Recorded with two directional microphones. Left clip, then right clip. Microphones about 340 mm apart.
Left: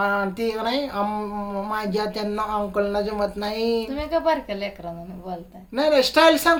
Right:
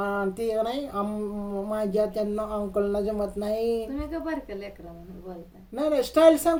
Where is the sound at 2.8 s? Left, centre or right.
Centre.